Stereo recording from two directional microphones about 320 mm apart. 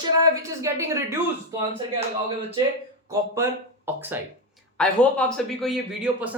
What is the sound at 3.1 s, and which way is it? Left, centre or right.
A woman's voice, centre.